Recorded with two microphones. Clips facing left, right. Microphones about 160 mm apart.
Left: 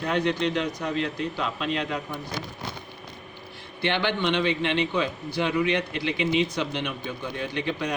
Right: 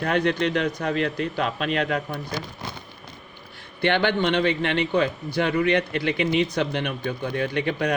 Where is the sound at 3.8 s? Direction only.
55° right (ahead or behind).